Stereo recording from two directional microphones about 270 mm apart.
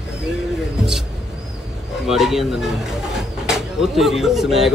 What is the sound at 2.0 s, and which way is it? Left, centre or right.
Speech, centre.